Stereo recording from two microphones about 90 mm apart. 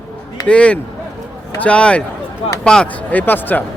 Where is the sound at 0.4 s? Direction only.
15° left (ahead or behind).